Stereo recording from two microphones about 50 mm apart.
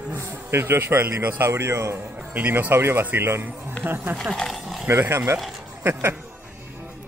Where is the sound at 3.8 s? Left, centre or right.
Right.